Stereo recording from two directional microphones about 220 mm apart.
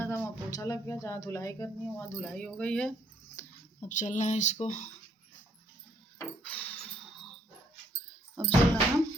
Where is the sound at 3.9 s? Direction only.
35° left (ahead or behind).